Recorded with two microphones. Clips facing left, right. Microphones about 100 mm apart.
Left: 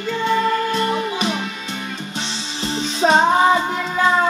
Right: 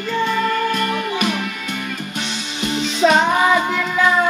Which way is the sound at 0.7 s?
30° left (ahead or behind).